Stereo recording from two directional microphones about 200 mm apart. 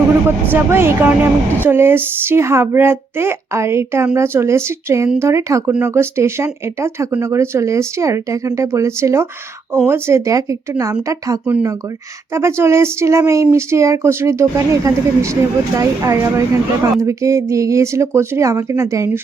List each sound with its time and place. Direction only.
0.3 s a woman's voice: 10° right (ahead or behind)